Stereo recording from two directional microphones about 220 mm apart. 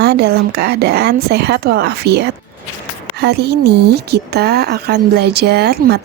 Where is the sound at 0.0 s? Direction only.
50° right (ahead or behind).